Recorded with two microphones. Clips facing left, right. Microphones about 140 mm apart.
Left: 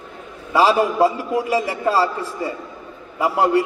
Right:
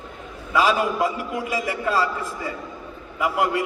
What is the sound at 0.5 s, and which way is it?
A man's voice, 30° left (ahead or behind).